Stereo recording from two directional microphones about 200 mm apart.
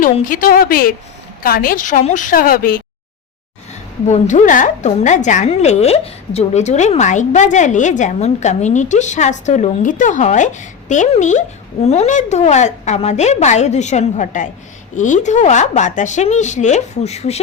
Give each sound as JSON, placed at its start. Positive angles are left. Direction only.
{"t": 0.0, "sound": "a woman's voice", "side_deg": 45}
{"t": 4.0, "sound": "a woman's voice", "side_deg": 35}